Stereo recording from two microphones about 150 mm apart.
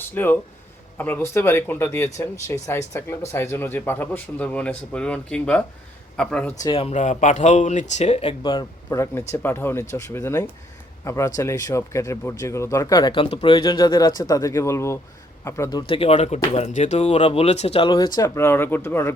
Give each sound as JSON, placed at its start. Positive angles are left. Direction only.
{"t": 0.0, "sound": "speech", "side_deg": 15}
{"t": 6.6, "sound": "speech", "side_deg": 35}
{"t": 6.9, "sound": "speech", "side_deg": 50}
{"t": 9.4, "sound": "a man's voice", "side_deg": 15}
{"t": 15.9, "sound": "speech", "side_deg": 40}